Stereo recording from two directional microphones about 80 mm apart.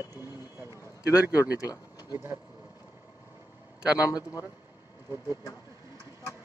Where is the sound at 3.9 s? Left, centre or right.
Left.